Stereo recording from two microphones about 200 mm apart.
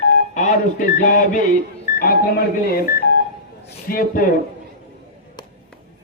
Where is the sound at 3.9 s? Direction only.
45° left (ahead or behind).